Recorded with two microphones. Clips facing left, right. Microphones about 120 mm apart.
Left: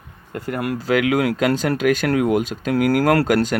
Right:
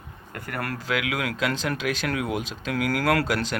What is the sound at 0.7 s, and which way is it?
Speech, 40° left (ahead or behind).